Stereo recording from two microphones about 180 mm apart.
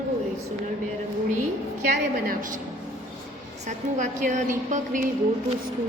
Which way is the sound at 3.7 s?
45° right (ahead or behind).